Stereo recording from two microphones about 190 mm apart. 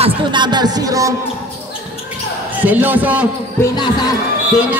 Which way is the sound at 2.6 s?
10° right (ahead or behind).